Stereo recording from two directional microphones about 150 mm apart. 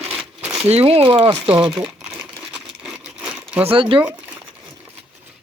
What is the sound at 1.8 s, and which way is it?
Sewing machine, 15° right (ahead or behind).